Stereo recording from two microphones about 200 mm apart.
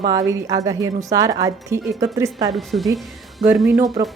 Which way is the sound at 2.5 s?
Centre (ahead or behind).